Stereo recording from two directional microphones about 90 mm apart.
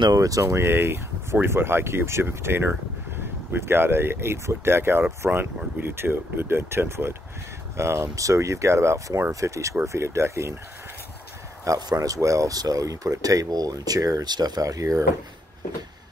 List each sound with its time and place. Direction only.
0.1 s speech: 40° right (ahead or behind)
11.6 s speech: 35° right (ahead or behind)